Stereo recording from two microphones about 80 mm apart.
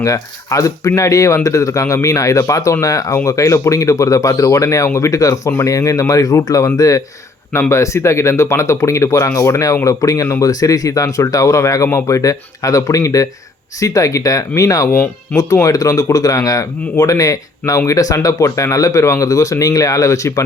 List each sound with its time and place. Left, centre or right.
0.0 s speech: left